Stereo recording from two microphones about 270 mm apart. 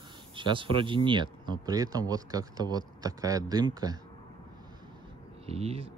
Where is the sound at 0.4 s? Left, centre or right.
Centre.